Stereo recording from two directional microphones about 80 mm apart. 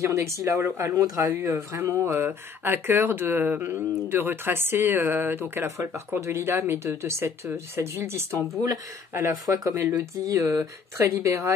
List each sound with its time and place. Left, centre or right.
0.0 s speech: right
1.0 s speech: right
1.3 s speech: right
9.1 s speech: right